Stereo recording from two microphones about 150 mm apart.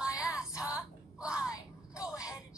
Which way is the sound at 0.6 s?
5° right (ahead or behind).